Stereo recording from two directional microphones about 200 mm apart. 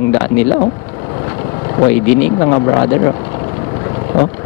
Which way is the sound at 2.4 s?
20° left (ahead or behind).